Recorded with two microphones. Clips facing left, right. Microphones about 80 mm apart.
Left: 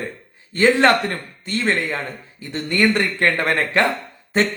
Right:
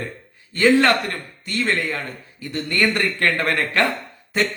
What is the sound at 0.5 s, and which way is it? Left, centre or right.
Speech, left.